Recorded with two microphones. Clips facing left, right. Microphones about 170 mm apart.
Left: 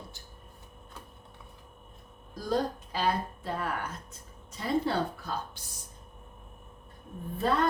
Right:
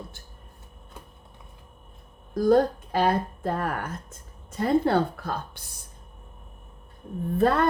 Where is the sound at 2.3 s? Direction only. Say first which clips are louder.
Right 10 dB; 55° right (ahead or behind).